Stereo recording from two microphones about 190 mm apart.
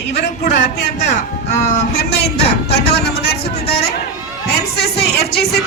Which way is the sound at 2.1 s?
60° left (ahead or behind).